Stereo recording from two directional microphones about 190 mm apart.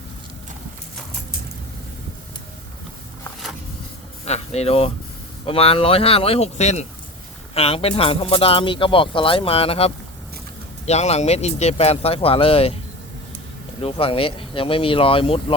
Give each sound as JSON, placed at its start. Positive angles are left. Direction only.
{"t": 4.3, "sound": "speech", "side_deg": 35}
{"t": 13.8, "sound": "speech", "side_deg": 30}